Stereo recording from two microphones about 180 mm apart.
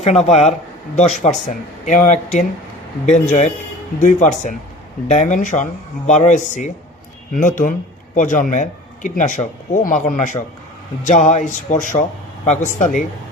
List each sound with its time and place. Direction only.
0.0 s a man's voice: 40° left (ahead or behind)